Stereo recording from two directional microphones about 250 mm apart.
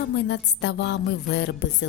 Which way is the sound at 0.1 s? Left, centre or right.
Left.